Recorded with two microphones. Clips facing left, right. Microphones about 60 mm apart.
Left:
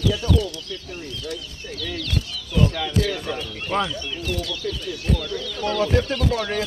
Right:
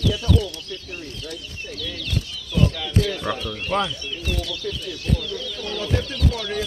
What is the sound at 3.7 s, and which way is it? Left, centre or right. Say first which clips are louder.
Speech: even; centre.